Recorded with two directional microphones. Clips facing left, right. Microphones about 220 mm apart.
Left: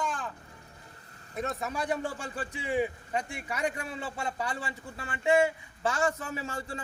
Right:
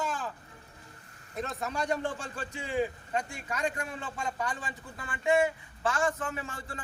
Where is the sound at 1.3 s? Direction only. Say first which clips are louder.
Left 1 dB; centre (ahead or behind).